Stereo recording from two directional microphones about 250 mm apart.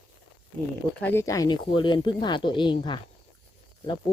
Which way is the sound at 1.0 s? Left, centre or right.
Centre.